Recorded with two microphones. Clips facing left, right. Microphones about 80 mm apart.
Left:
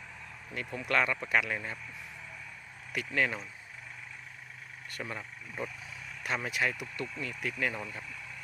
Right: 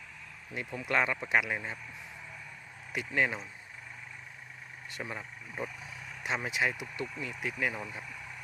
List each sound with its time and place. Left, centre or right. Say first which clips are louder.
0.5 s speech: even; centre
2.9 s speech: right 1 dB; centre
4.9 s speech: even; centre